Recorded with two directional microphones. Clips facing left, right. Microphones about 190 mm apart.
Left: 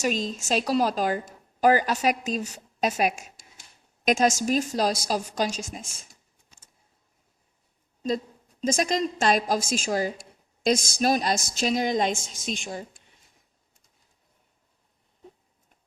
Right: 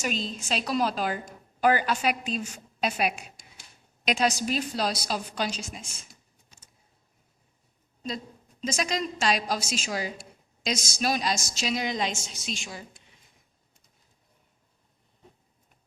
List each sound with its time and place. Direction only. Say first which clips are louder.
0.0 s a woman's voice: left 4 dB; 40° left (ahead or behind)
8.6 s a woman's voice: left 5 dB; 50° left (ahead or behind)